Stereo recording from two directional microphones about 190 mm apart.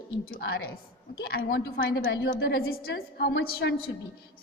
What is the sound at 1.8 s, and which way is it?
Speech, 85° left.